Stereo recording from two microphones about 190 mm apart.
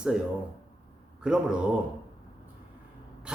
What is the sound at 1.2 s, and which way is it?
Speech, 5° right (ahead or behind).